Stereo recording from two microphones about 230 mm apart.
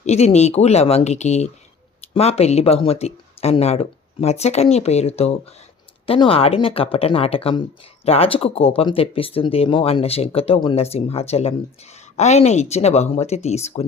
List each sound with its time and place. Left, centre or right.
0.0 s speech: left